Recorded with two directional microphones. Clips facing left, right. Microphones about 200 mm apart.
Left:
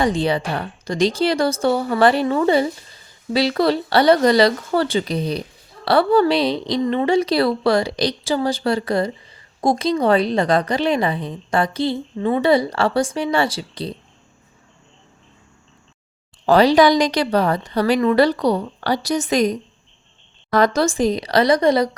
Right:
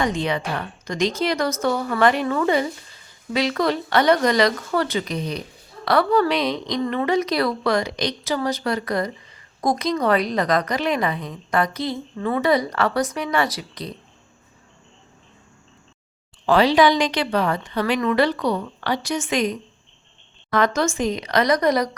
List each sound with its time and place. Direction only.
0.0 s a woman's voice: 35° left (ahead or behind)
16.5 s a woman's voice: 40° left (ahead or behind)